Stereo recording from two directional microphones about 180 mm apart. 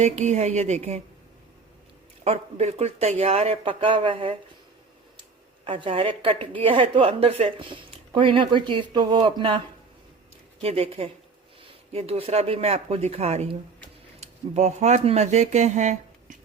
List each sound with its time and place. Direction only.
0.0 s speech: 40° right (ahead or behind)
2.2 s speech: 40° right (ahead or behind)
5.6 s a woman's voice: 30° right (ahead or behind)
10.6 s speech: 35° right (ahead or behind)